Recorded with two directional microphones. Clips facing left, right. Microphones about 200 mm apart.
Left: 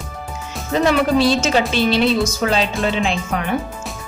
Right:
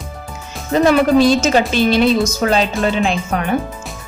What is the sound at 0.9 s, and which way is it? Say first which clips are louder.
Speech: right 4 dB; 45° right (ahead or behind).